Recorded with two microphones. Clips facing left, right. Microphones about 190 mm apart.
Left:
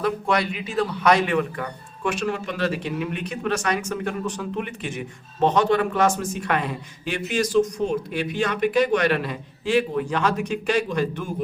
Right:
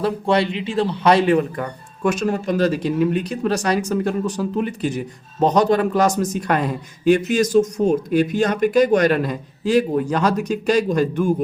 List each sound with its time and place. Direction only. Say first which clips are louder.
0.0 s speech: right 4 dB; 30° right (ahead or behind)